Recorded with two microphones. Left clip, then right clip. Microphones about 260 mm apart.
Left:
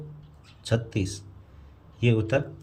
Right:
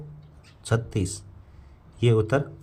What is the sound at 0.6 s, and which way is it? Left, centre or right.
Speech, right.